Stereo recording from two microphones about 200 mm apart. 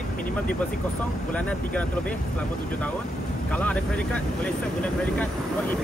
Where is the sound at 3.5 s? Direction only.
5° left (ahead or behind).